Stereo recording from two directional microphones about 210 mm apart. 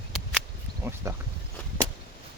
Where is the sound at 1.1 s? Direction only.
15° right (ahead or behind).